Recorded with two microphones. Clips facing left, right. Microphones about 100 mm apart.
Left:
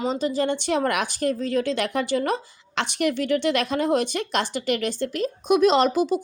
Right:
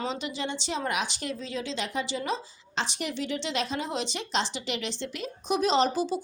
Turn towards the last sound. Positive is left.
turn(degrees=55)  # may be behind; listen again after turning